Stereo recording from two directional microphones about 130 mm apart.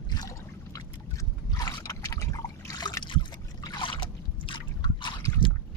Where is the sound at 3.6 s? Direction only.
35° left (ahead or behind).